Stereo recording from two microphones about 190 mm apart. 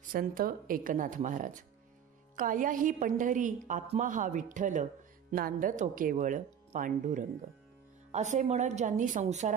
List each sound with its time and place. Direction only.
0.1 s a woman's voice: 50° right (ahead or behind)